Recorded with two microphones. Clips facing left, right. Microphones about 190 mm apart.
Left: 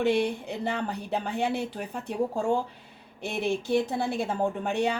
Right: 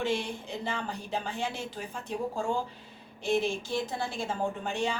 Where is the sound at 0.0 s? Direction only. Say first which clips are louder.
Left 6 dB; 60° left (ahead or behind).